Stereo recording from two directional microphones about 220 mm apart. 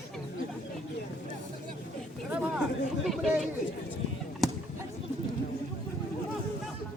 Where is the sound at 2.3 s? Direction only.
Centre (ahead or behind).